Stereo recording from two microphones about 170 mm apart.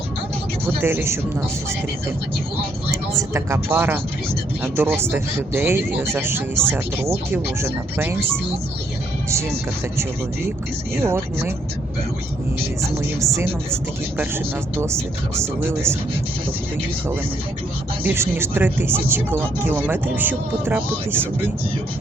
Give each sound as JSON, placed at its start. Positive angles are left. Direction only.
{"t": 0.8, "sound": "speech", "side_deg": -10}
{"t": 2.9, "sound": "speech", "side_deg": -15}
{"t": 10.9, "sound": "speech", "side_deg": -15}
{"t": 13.2, "sound": "speech", "side_deg": -15}
{"t": 14.8, "sound": "speech", "side_deg": -15}
{"t": 18.0, "sound": "speech", "side_deg": -10}